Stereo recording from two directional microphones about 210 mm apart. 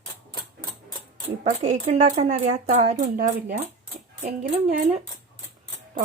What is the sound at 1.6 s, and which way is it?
Speech, 35° right (ahead or behind).